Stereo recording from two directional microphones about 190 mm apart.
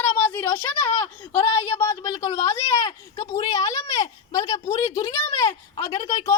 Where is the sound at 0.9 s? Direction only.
30° left (ahead or behind).